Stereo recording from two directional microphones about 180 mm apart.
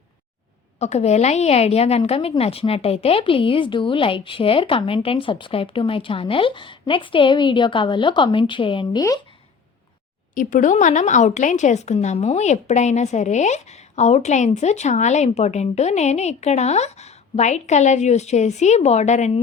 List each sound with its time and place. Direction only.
0.8 s a woman's voice: 35° left (ahead or behind); by 9.2 s 20° left (ahead or behind)
10.3 s a woman's voice: 45° left (ahead or behind)